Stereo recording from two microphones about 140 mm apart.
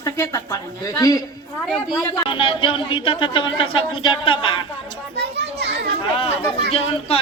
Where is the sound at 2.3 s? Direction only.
40° left (ahead or behind).